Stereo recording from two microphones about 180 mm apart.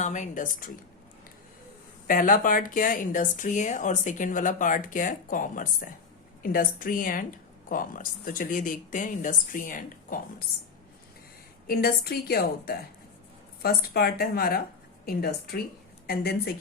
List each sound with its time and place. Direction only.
0.0 s speech: 45° left (ahead or behind)
2.0 s speech: 50° left (ahead or behind)
11.7 s a woman's voice: 55° left (ahead or behind)